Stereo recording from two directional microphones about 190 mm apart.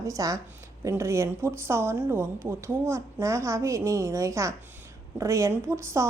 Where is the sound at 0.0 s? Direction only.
15° right (ahead or behind).